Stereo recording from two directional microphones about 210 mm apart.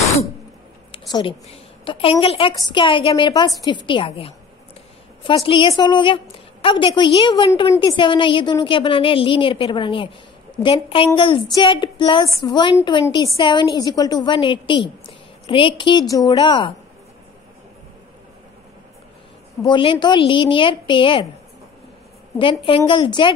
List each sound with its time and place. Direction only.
0.9 s a woman's voice: 20° left (ahead or behind)
19.6 s a woman's voice: 25° left (ahead or behind)
22.4 s a woman's voice: 25° left (ahead or behind)